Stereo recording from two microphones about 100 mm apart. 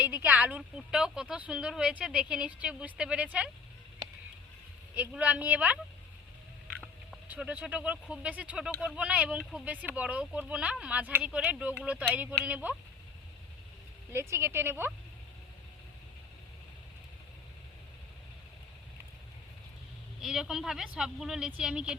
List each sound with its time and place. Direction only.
0.0 s speech: 15° right (ahead or behind)
4.9 s speech: 15° right (ahead or behind)
7.3 s speech: 15° right (ahead or behind)
14.1 s a woman's voice: 25° right (ahead or behind)
20.2 s speech: 5° right (ahead or behind)